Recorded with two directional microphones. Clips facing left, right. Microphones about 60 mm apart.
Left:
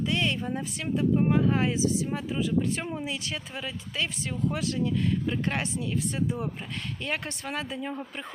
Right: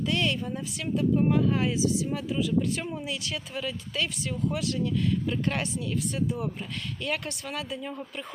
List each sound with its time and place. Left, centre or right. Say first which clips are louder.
0.0 s speech: even; left